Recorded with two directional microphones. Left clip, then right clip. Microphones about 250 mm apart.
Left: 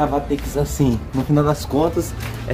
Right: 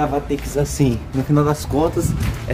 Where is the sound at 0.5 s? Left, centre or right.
Centre.